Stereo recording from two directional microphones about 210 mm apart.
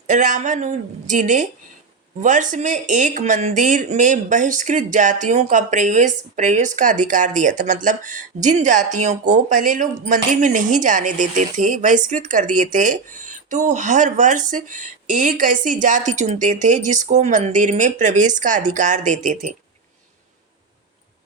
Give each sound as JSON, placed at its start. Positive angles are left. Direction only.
{"t": 0.1, "sound": "speech", "side_deg": -35}